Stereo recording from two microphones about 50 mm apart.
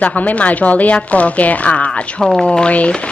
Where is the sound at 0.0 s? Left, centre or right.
Left.